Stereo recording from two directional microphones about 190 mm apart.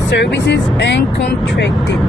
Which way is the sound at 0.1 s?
65° left (ahead or behind).